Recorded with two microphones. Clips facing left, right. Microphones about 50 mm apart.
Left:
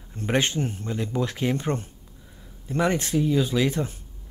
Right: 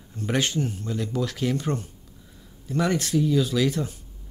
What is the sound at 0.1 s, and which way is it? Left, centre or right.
Speech, left.